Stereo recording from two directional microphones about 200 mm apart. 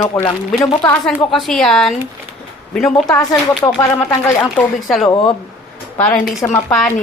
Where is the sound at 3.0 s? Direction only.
20° left (ahead or behind).